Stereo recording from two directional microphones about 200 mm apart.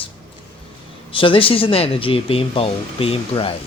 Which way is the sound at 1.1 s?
25° left (ahead or behind).